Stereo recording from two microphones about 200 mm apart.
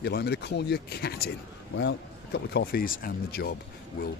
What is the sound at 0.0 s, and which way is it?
Speech, 55° left (ahead or behind).